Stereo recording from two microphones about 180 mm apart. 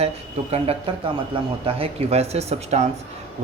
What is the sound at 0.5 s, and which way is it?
Speech, 35° right (ahead or behind).